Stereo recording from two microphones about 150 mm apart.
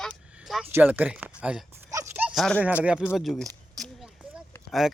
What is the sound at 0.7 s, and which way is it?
Speech, 15° right (ahead or behind).